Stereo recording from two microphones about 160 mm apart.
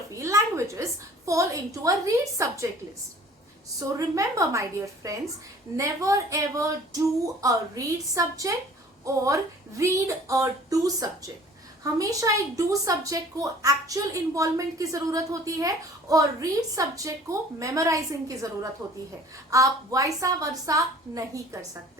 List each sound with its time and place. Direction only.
0.1 s a woman's voice: 20° right (ahead or behind)
3.8 s a woman's voice: 20° right (ahead or behind)